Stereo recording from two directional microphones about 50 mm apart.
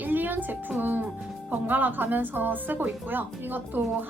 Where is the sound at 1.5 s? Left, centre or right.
Right.